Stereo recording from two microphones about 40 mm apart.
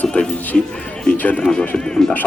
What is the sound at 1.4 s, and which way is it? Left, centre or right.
Speech, centre.